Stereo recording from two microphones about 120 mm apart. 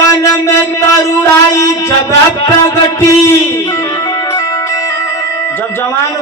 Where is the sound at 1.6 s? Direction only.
25° left (ahead or behind).